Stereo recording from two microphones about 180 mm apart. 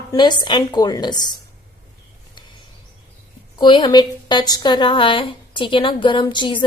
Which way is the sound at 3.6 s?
25° left (ahead or behind).